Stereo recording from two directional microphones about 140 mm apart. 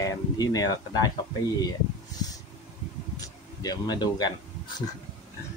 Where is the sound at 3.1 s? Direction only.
30° left (ahead or behind).